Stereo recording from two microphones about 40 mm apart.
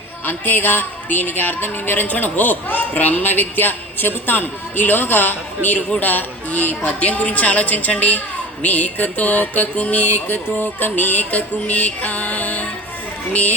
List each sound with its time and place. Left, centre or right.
0.3 s speech: left
6.8 s a woman's voice: left
11.3 s a woman's voice: left